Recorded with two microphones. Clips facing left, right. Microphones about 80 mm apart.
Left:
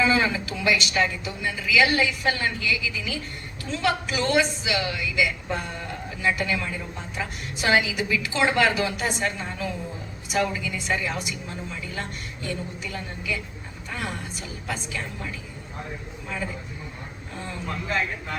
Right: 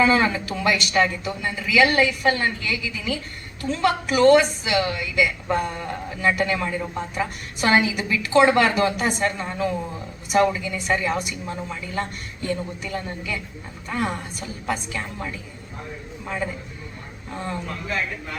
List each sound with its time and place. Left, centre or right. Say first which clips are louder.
0.0 s a woman's voice: right 3 dB; right